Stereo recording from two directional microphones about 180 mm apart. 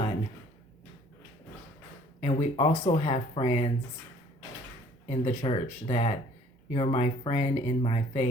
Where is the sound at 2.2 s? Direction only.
35° left (ahead or behind).